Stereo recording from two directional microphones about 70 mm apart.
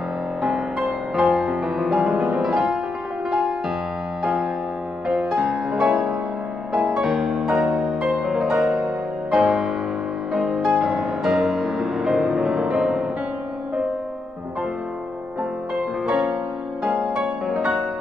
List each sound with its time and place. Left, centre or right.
0.4 s music: centre
16.1 s music: centre
17.2 s music: centre